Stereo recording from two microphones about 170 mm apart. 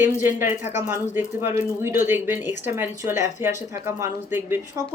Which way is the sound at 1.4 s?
15° right (ahead or behind).